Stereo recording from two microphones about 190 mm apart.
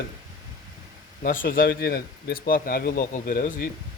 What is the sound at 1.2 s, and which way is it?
Speech, 45° left (ahead or behind).